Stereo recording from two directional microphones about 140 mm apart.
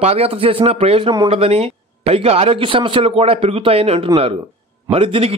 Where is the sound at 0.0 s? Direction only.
45° right (ahead or behind).